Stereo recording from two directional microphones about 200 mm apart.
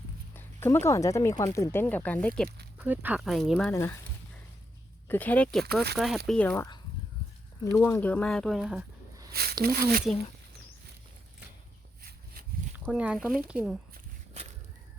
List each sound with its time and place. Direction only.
0.3 s speech: 10° left (ahead or behind)
2.7 s speech: 10° right (ahead or behind)
3.7 s speech: 10° left (ahead or behind)
5.0 s speech: 10° left (ahead or behind)
9.3 s a sound: 50° right (ahead or behind)
12.0 s a sound: 45° right (ahead or behind)
12.7 s speech: 5° right (ahead or behind)